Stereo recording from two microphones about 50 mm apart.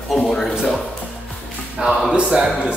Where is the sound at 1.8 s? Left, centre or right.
Right.